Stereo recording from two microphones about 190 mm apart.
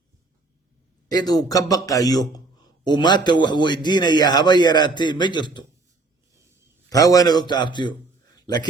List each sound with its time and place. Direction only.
1.1 s a man's voice: 20° left (ahead or behind)
6.9 s a man's voice: 20° left (ahead or behind)